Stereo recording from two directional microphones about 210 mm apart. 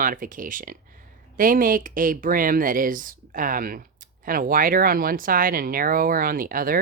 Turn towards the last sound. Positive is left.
turn(degrees=-45)  # may be behind; listen again after turning